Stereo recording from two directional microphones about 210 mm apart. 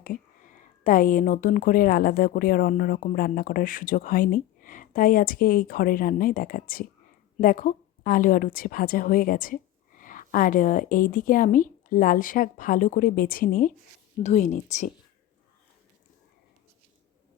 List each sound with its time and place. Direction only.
0.0 s a woman's voice: 40° left (ahead or behind)